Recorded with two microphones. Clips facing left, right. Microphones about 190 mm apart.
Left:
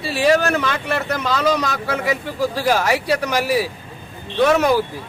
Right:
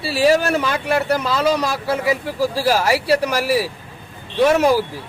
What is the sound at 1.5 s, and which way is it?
Speech, 30° right (ahead or behind).